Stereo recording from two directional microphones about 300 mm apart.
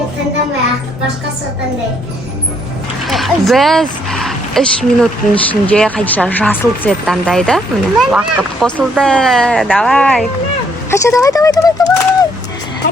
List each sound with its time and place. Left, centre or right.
3.0 s speech: centre